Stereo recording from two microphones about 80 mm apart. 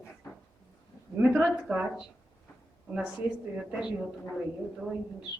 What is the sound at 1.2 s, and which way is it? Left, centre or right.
Speech, centre.